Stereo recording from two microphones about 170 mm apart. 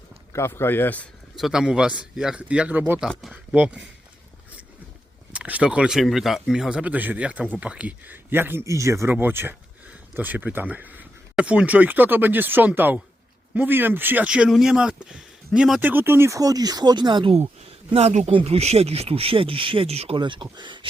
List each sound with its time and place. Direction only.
0.3 s speech: 15° left (ahead or behind)
1.4 s a man's voice: 5° right (ahead or behind)
5.3 s speech: 5° right (ahead or behind); by 20.8 s 30° right (ahead or behind)